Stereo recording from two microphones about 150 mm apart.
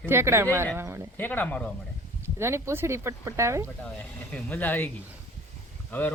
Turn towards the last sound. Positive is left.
turn(degrees=15)  # may be behind; listen again after turning